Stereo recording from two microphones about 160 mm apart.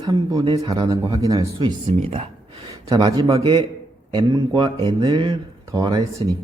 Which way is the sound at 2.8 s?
25° right (ahead or behind).